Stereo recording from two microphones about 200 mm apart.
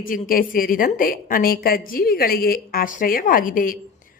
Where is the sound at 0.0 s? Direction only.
45° left (ahead or behind).